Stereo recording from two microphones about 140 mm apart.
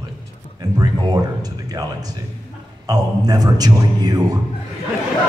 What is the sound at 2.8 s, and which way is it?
A man's voice, 30° right (ahead or behind).